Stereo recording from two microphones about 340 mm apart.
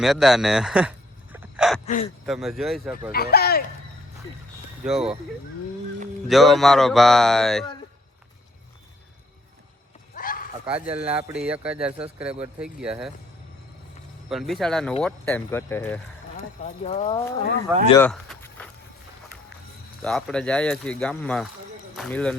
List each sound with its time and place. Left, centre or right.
0.0 s a sound: centre
2.0 s speech: centre
3.1 s speech: left
4.8 s speech: centre
6.2 s speech: centre
10.2 s horse: left
10.7 s speech: centre
14.3 s speech: centre
16.4 s speech: centre
17.8 s a sound: centre
20.0 s speech: centre